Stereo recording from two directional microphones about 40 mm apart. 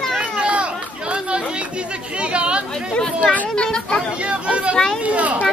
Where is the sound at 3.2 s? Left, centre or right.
Left.